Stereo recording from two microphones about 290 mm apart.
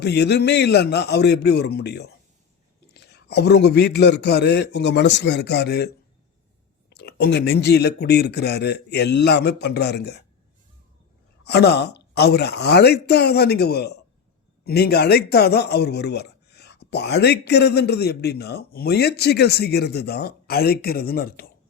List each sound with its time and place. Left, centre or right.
0.0 s speech: left
6.9 s speech: left
11.4 s speech: left